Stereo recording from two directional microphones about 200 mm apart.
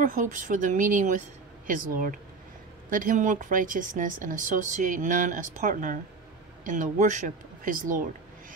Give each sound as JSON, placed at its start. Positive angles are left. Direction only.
{"t": 0.0, "sound": "speech", "side_deg": -40}